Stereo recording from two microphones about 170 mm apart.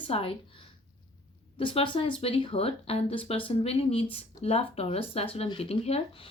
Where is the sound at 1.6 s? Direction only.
30° left (ahead or behind).